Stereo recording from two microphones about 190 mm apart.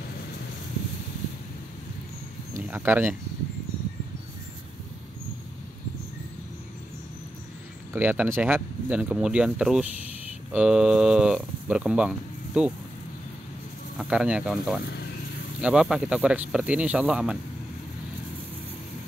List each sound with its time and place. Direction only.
2.7 s speech: 10° right (ahead or behind)
7.9 s speech: 10° right (ahead or behind)
13.9 s speech: 5° right (ahead or behind)